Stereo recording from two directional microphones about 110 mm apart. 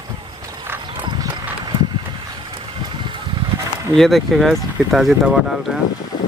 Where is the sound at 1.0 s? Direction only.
40° right (ahead or behind).